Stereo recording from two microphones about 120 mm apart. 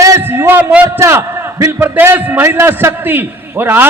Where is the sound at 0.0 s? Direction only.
25° right (ahead or behind).